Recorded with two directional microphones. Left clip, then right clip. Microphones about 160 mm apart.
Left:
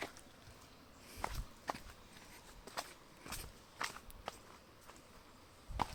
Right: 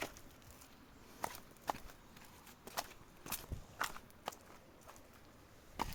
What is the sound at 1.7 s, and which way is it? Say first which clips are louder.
Horse: right 2 dB; 90° right.